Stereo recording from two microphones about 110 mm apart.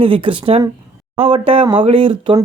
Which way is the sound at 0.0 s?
55° right (ahead or behind).